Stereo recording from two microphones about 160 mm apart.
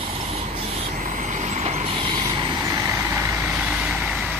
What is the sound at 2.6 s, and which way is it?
Vehicle, 20° right (ahead or behind).